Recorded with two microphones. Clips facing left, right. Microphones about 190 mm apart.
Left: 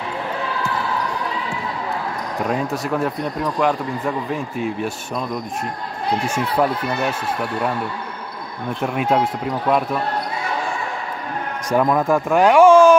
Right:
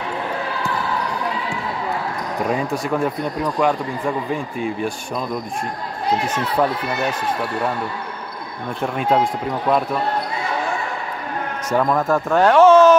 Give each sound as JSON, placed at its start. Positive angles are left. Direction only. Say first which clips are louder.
{"t": 2.4, "sound": "speech", "louder": "right 1 dB", "side_deg": 0}
{"t": 6.2, "sound": "speech", "louder": "left 2 dB", "side_deg": 10}
{"t": 8.6, "sound": "speech", "louder": "even", "side_deg": 5}
{"t": 11.7, "sound": "speech", "louder": "left 1 dB", "side_deg": 10}